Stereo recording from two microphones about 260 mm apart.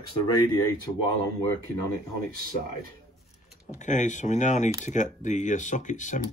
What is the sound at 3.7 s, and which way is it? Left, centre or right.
Speech, left.